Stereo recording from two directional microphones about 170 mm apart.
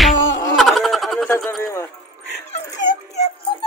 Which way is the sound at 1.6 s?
15° left (ahead or behind).